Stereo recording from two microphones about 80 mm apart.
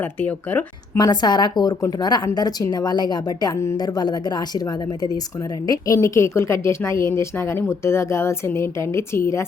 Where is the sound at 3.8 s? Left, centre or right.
Left.